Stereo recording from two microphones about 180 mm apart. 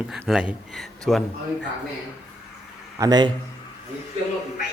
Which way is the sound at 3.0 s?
20° right (ahead or behind).